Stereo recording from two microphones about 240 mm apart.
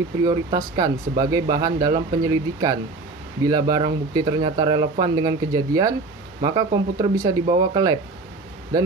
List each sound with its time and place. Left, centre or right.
0.2 s speech: centre